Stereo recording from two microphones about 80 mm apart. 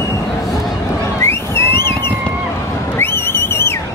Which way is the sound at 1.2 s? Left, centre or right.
Left.